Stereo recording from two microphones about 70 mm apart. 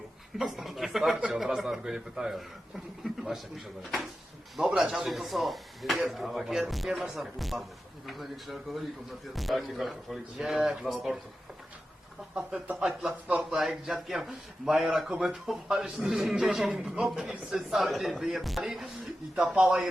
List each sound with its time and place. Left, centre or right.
0.3 s a man's voice: centre
10.6 s speech: centre
10.8 s a man's voice: centre
12.3 s a man's voice: centre